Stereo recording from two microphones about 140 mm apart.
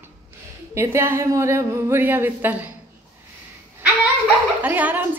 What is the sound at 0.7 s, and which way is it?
A woman's voice, 20° right (ahead or behind).